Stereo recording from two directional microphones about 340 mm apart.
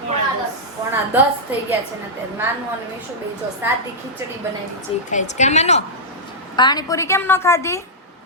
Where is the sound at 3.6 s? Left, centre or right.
Centre.